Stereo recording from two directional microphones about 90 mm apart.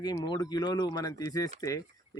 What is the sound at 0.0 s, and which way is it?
Speech, 50° left (ahead or behind).